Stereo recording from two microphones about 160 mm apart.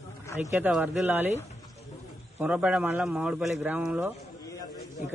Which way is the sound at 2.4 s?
5° right (ahead or behind).